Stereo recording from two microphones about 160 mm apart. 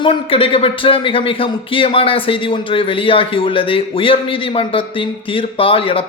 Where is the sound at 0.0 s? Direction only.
35° left (ahead or behind).